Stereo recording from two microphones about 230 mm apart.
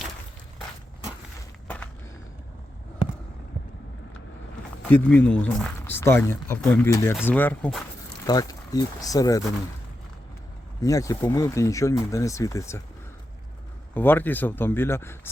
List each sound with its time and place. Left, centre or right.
1.6 s a sound: centre
4.9 s speech: centre
10.8 s speech: centre
13.9 s speech: centre